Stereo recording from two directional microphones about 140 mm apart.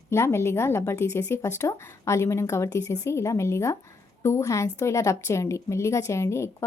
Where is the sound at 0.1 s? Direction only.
20° left (ahead or behind).